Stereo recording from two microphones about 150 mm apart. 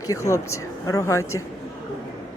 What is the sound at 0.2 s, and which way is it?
Speech, 20° left (ahead or behind).